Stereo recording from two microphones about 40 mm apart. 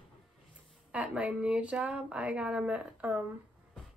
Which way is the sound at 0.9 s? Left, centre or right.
Right.